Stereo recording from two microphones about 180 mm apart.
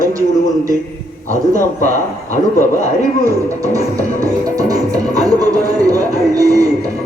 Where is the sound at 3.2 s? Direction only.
20° right (ahead or behind).